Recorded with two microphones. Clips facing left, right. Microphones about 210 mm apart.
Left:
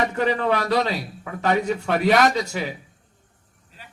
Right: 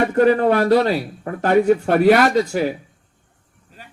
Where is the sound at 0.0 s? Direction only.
50° right (ahead or behind).